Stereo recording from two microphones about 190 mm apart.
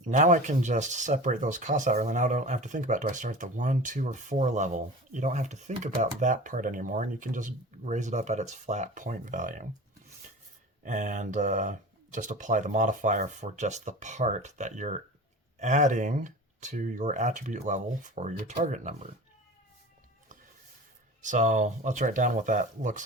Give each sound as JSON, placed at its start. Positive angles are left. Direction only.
{"t": 0.0, "sound": "speech", "side_deg": -40}
{"t": 10.8, "sound": "speech", "side_deg": -40}
{"t": 21.2, "sound": "speech", "side_deg": -40}